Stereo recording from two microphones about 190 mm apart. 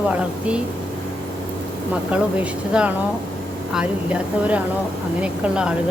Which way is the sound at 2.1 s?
5° right (ahead or behind).